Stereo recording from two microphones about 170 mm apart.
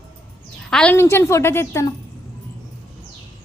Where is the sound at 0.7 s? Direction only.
5° left (ahead or behind).